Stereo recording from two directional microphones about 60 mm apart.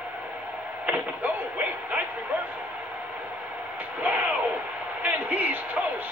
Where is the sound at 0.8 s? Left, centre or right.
Right.